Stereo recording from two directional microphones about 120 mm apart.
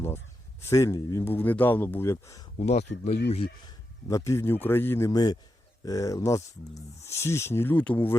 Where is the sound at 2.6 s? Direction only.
65° left (ahead or behind).